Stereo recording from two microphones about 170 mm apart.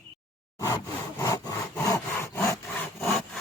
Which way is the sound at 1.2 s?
20° left (ahead or behind).